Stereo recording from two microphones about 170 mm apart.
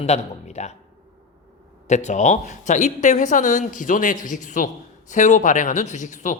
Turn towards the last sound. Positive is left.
turn(degrees=45)  # may be behind; listen again after turning